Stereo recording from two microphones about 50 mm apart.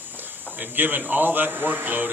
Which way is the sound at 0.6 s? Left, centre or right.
Right.